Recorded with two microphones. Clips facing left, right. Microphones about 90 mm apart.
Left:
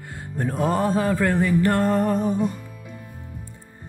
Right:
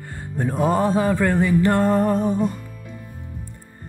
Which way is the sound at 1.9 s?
15° right (ahead or behind).